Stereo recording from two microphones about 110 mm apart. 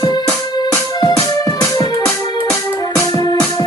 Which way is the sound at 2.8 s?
35° left (ahead or behind).